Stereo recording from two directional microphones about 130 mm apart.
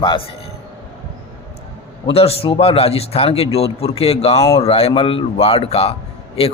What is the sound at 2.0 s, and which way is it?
A man's voice, 50° left (ahead or behind).